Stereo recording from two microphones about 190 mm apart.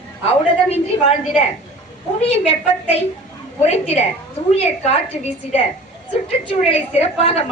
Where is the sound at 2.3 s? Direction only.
35° left (ahead or behind).